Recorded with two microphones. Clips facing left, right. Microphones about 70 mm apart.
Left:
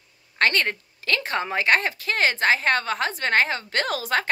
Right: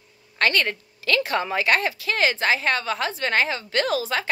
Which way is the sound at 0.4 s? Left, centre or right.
Left.